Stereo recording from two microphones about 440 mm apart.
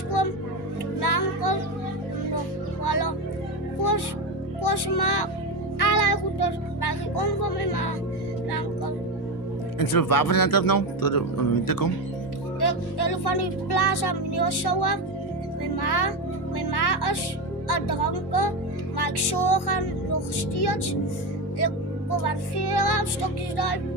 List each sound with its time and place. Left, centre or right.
0.9 s music: left
2.8 s music: left
4.6 s speech: left
5.8 s music: left
9.7 s speech: left
12.5 s speech: left
15.6 s music: left
17.7 s speech: left
18.9 s music: left
20.6 s speech: left
22.2 s speech: left